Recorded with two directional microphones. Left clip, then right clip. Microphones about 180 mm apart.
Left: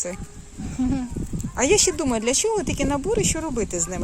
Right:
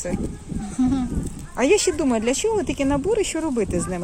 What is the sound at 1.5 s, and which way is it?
Speech, 20° left (ahead or behind).